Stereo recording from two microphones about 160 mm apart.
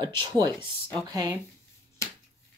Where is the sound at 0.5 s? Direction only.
5° left (ahead or behind).